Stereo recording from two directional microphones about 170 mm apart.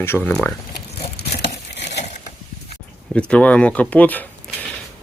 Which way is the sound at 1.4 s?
90° left.